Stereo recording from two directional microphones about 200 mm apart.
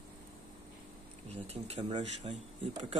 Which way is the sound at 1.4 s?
30° right (ahead or behind).